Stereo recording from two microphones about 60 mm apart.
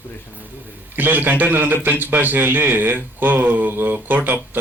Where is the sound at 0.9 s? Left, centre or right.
Right.